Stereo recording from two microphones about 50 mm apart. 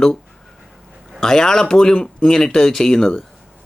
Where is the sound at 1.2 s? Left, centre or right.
Centre.